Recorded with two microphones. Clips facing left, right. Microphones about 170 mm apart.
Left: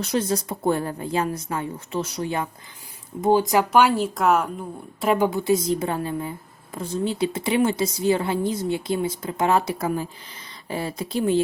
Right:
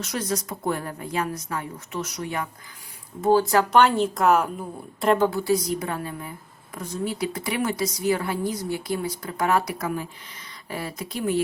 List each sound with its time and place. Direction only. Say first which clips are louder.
0.0 s a woman's voice: left 5 dB; 30° left (ahead or behind)
3.2 s a woman's voice: even; 15° left (ahead or behind)